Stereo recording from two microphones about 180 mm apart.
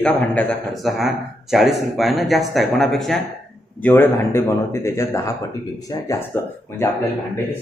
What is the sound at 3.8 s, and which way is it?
Speech, 15° left (ahead or behind).